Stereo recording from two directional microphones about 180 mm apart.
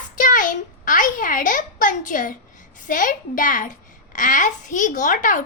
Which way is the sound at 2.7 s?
45° left (ahead or behind).